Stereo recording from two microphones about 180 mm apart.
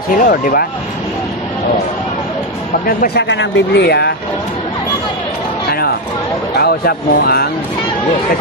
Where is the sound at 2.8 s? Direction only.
60° left (ahead or behind).